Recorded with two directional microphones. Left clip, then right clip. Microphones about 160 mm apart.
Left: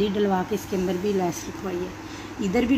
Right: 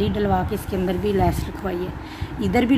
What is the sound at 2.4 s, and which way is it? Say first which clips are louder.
Speech: right 3 dB; 30° right (ahead or behind).